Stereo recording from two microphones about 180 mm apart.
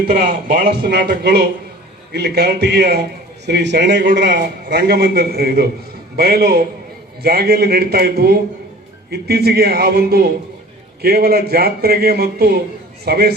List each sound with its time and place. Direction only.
0.1 s a man's voice: 50° right (ahead or behind)